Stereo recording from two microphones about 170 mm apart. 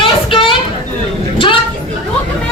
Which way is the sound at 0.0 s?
30° left (ahead or behind).